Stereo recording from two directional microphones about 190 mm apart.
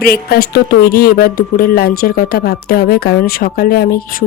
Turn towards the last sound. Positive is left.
turn(degrees=50)  # may be behind; listen again after turning